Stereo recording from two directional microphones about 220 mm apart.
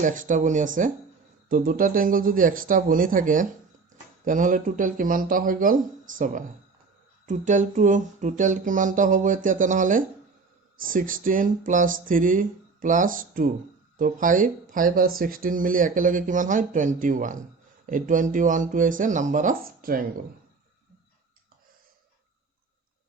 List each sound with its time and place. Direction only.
0.0 s speech: 35° right (ahead or behind)